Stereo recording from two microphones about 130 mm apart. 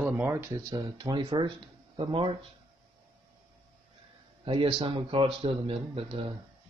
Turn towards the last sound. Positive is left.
turn(degrees=-45)  # may be behind; listen again after turning